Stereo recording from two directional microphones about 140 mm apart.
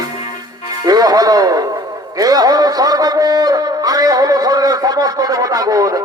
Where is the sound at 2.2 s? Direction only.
25° right (ahead or behind).